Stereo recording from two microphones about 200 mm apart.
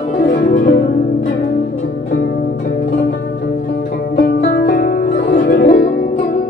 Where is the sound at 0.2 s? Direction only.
45° left (ahead or behind).